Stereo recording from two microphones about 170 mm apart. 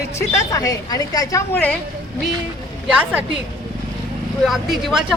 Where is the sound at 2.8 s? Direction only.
5° right (ahead or behind).